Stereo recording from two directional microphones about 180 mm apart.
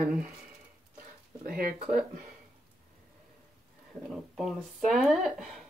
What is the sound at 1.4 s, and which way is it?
Speech, 55° right (ahead or behind).